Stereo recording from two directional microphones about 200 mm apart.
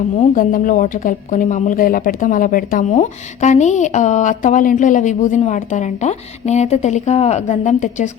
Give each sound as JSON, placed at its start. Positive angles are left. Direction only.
{"t": 0.2, "sound": "speech", "side_deg": 40}